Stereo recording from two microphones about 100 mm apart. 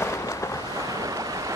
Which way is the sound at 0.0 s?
30° left (ahead or behind).